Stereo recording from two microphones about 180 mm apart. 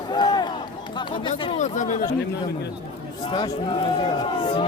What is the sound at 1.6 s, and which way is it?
Speech, 45° left (ahead or behind).